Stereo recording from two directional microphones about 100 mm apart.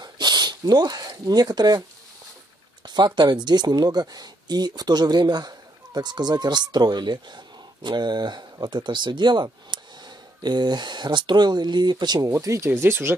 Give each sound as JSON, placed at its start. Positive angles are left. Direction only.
{"t": 0.0, "sound": "speech", "side_deg": -45}
{"t": 2.8, "sound": "a sound", "side_deg": -50}
{"t": 3.2, "sound": "speech", "side_deg": -45}
{"t": 12.3, "sound": "speech", "side_deg": -30}